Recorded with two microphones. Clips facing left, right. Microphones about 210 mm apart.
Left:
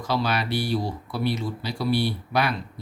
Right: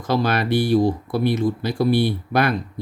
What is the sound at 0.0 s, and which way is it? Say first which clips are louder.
Speech: right 5 dB; 50° right (ahead or behind).